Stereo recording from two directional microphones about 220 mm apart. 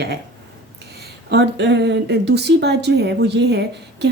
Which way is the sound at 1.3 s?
50° right (ahead or behind).